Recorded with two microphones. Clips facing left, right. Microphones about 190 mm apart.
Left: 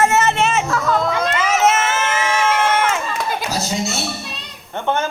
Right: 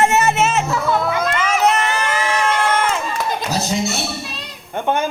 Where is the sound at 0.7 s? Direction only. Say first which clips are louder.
Even; 5° right (ahead or behind).